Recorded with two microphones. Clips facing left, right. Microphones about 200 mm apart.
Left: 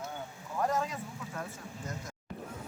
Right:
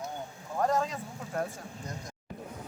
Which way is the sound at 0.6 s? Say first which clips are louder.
Right 3 dB; 35° right (ahead or behind).